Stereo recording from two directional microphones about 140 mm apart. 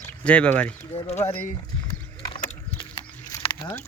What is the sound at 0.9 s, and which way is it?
Speech, 50° left (ahead or behind).